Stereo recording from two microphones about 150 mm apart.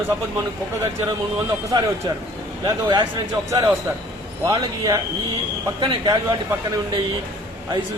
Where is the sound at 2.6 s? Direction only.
30° right (ahead or behind).